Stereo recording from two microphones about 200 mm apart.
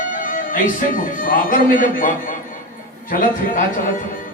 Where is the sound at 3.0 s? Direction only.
40° left (ahead or behind).